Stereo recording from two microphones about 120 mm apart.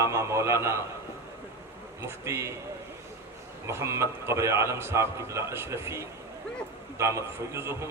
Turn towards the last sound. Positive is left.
turn(degrees=-25)  # may be behind; listen again after turning